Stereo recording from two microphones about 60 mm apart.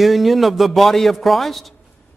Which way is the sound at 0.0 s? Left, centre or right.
Centre.